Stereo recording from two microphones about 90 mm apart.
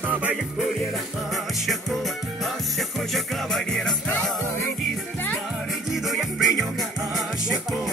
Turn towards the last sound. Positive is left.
turn(degrees=0)  # may be behind; listen again after turning